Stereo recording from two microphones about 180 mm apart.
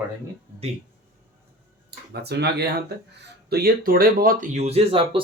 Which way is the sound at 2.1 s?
65° right (ahead or behind).